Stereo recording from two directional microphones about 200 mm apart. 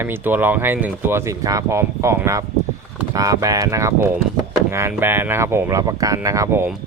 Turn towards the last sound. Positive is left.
turn(degrees=-10)  # may be behind; listen again after turning